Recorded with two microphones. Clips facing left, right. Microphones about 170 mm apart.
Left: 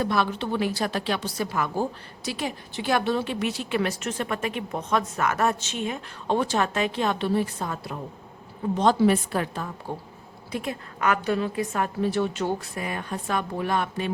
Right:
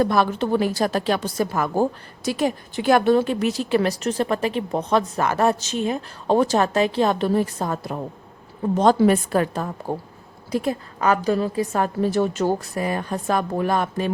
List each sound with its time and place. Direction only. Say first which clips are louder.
0.0 s a woman's voice: right 6 dB; 45° right (ahead or behind)